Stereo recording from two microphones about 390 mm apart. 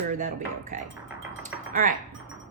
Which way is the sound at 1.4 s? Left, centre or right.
Centre.